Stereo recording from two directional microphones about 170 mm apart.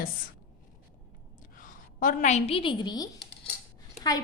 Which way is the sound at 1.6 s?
50° left (ahead or behind).